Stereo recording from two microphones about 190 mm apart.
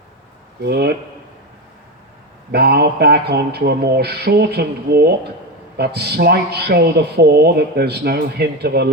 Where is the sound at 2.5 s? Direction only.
55° right (ahead or behind).